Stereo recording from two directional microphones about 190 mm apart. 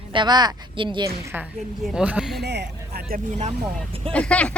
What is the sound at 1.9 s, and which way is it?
Speech, 5° right (ahead or behind).